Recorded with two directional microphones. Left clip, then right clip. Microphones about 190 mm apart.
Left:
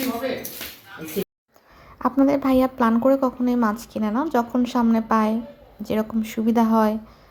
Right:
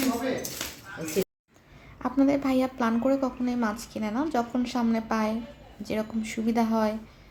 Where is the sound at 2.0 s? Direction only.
25° left (ahead or behind).